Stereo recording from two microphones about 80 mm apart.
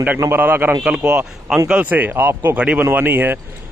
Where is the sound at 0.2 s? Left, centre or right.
Right.